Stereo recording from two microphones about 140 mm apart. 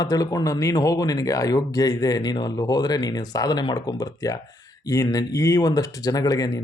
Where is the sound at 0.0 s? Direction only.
25° left (ahead or behind).